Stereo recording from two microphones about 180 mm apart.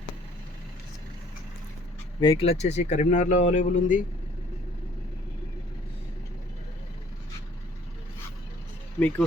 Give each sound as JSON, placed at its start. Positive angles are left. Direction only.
{"t": 2.2, "sound": "speech", "side_deg": 30}
{"t": 9.0, "sound": "speech", "side_deg": 10}